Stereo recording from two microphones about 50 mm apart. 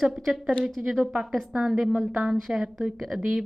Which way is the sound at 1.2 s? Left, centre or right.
Centre.